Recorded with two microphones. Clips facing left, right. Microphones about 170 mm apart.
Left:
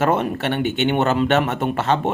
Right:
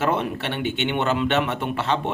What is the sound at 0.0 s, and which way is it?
Speech, 45° left (ahead or behind).